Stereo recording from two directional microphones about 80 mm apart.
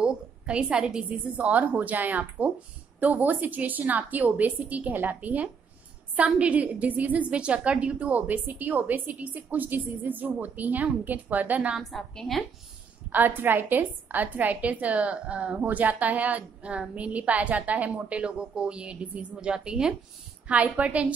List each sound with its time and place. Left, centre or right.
0.0 s a woman's voice: centre
11.7 s a woman's voice: centre
13.1 s a woman's voice: right